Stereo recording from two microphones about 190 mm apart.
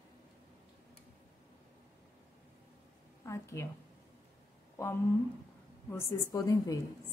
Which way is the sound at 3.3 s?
15° left (ahead or behind).